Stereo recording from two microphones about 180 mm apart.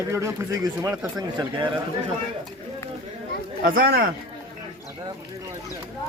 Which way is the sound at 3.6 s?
55° right (ahead or behind).